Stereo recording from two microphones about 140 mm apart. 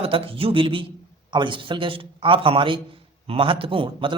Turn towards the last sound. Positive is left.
turn(degrees=-40)  # may be behind; listen again after turning